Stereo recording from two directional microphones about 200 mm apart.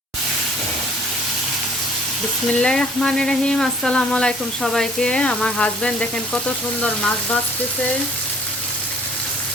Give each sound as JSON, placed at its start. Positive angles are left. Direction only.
{"t": 2.5, "sound": "frying", "side_deg": 5}
{"t": 6.8, "sound": "speech", "side_deg": 5}